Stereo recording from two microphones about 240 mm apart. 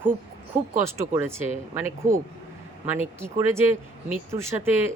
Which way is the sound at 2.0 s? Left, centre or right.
Right.